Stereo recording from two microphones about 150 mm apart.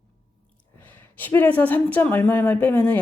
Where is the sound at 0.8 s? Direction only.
10° left (ahead or behind).